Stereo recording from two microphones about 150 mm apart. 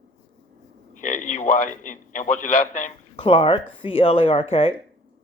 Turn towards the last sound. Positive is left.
turn(degrees=40)  # may be behind; listen again after turning